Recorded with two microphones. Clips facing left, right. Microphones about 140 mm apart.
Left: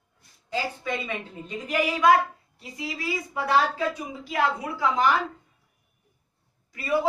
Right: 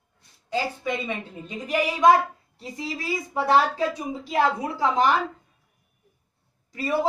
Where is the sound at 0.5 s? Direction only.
20° right (ahead or behind).